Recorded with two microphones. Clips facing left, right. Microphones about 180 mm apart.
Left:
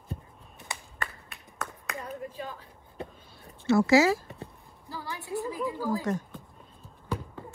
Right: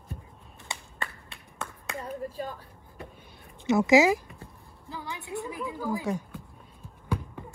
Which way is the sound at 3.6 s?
20° right (ahead or behind).